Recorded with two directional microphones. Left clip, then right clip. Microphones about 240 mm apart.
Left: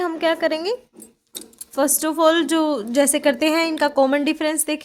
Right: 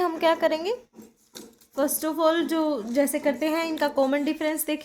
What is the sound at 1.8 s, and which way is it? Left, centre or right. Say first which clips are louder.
A woman's voice: left 6 dB; left.